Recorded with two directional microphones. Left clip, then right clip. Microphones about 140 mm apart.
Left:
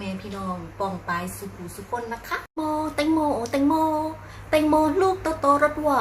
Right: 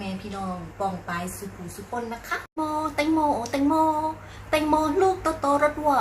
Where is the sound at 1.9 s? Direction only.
20° left (ahead or behind).